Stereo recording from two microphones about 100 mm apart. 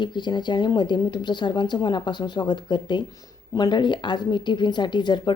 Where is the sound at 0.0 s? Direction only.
50° left (ahead or behind).